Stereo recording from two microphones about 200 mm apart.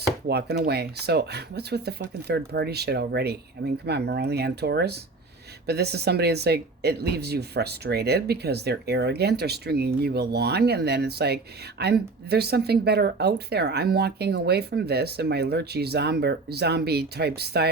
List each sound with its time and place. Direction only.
0.3 s speech: 55° right (ahead or behind)